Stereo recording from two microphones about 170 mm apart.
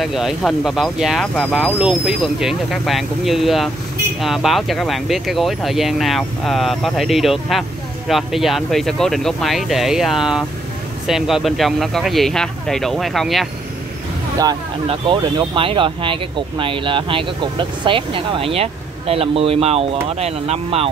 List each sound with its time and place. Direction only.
0.0 s speech: centre (ahead or behind)
14.9 s speech: 30° right (ahead or behind)